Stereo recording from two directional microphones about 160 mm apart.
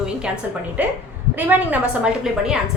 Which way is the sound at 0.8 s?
10° right (ahead or behind).